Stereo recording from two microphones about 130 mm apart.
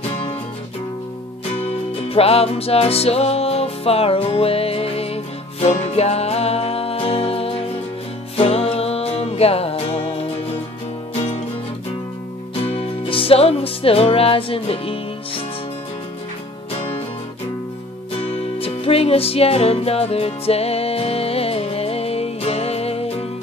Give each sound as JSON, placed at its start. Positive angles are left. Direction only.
{"t": 1.5, "sound": "music", "side_deg": 50}
{"t": 12.6, "sound": "music", "side_deg": 50}
{"t": 18.2, "sound": "music", "side_deg": 55}